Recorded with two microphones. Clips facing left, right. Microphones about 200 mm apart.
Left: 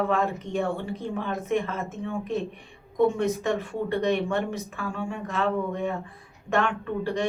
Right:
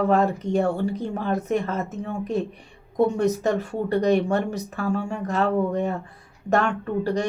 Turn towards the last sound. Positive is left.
turn(degrees=-40)  # may be behind; listen again after turning